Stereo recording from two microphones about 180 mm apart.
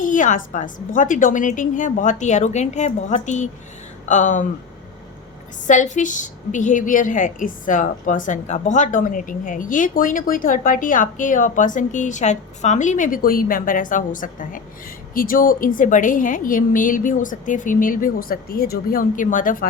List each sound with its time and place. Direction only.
0.0 s a woman's voice: 45° left (ahead or behind)
5.6 s a woman's voice: 40° left (ahead or behind)